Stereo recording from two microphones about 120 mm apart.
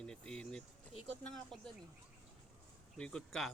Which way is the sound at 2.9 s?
5° left (ahead or behind).